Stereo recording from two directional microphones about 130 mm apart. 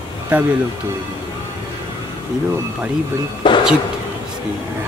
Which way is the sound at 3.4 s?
40° left (ahead or behind).